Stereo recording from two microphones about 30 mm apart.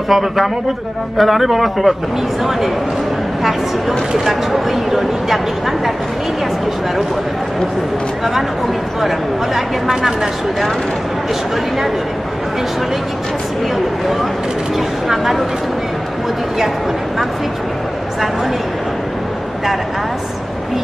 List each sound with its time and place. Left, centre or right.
0.1 s a man's voice: centre
4.2 s speech: centre
9.0 s speech: centre
15.0 s speech: centre